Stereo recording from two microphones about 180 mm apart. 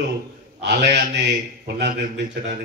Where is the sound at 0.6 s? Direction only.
70° right (ahead or behind).